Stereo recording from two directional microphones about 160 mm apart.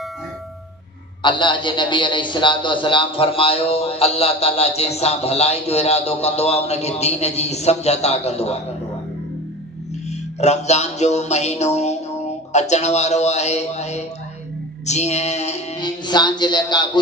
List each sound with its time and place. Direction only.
1.2 s a man's voice: 30° left (ahead or behind)
10.0 s music: 45° left (ahead or behind)
15.8 s speech: 25° left (ahead or behind)